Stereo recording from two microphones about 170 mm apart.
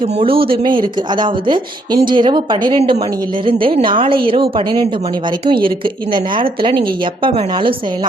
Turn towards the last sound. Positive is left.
turn(degrees=-30)  # may be behind; listen again after turning